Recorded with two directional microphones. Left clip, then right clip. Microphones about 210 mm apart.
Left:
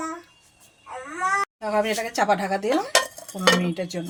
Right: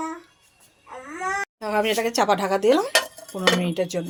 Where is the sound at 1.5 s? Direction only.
40° right (ahead or behind).